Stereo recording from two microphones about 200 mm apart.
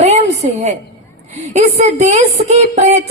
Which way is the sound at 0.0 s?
35° right (ahead or behind).